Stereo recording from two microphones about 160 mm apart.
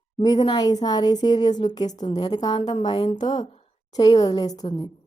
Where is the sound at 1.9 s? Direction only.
45° left (ahead or behind).